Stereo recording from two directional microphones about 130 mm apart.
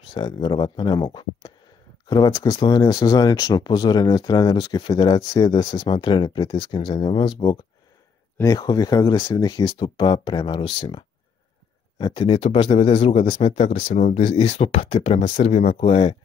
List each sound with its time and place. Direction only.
0.0 s speech: 40° left (ahead or behind)
8.5 s speech: 30° left (ahead or behind)
13.7 s speech: 75° left (ahead or behind)
15.8 s speech: 45° left (ahead or behind)